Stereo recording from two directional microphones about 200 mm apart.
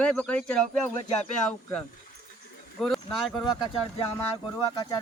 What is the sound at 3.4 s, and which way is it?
Speech, 25° left (ahead or behind).